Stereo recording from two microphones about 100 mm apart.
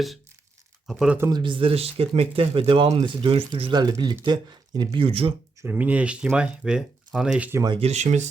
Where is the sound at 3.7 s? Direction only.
45° right (ahead or behind); by 5.3 s 65° right (ahead or behind).